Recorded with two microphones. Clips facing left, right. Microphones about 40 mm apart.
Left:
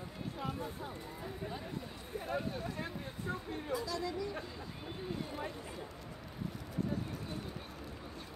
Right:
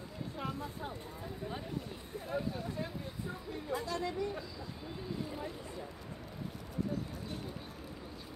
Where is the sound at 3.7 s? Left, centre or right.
Right.